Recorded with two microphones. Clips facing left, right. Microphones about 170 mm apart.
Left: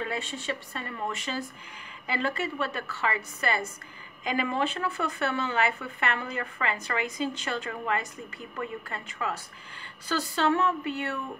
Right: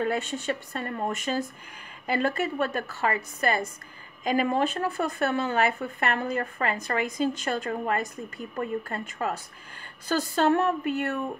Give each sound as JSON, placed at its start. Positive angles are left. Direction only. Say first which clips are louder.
{"t": 0.0, "sound": "speech", "louder": "right 6 dB", "side_deg": -45}